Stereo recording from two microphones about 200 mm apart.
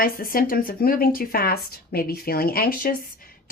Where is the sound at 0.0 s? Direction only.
45° left (ahead or behind).